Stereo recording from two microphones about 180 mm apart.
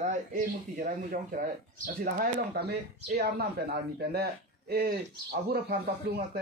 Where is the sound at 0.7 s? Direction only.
50° right (ahead or behind).